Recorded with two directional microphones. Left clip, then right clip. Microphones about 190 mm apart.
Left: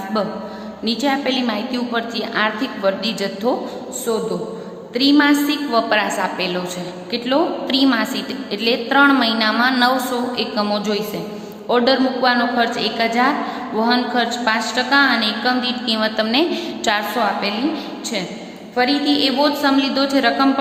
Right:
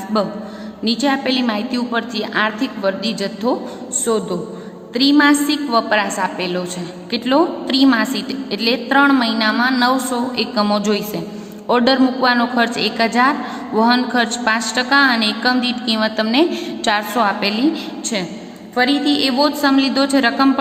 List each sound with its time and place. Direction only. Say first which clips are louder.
0.9 s a woman's voice: right 1 dB; 20° right (ahead or behind)
18.8 s a woman's voice: right 1 dB; 25° right (ahead or behind)